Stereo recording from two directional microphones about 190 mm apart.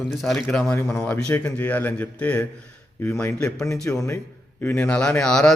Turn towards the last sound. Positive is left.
turn(degrees=5)  # may be behind; listen again after turning